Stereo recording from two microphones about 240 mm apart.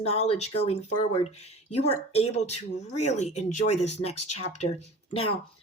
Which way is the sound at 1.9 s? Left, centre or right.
Left.